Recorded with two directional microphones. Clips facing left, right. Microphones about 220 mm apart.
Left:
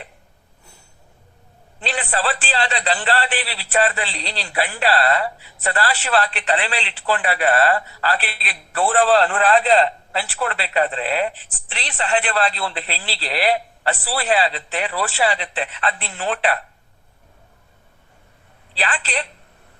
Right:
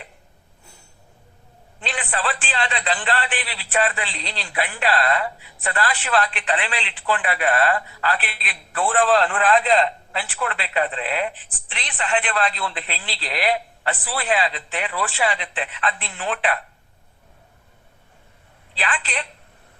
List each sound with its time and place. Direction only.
1.8 s a man's voice: 35° left (ahead or behind)
18.8 s a man's voice: 35° left (ahead or behind)